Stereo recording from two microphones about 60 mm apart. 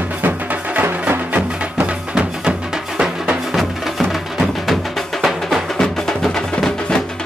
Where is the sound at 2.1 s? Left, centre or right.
Centre.